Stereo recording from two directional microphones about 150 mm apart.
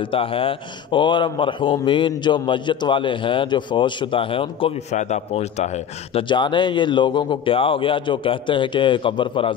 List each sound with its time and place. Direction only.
0.1 s speech: 35° left (ahead or behind)
4.9 s a man's voice: 50° left (ahead or behind)
6.1 s speech: 30° left (ahead or behind)